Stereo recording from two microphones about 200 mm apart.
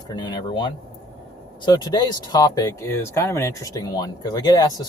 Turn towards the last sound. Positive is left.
turn(degrees=20)  # may be behind; listen again after turning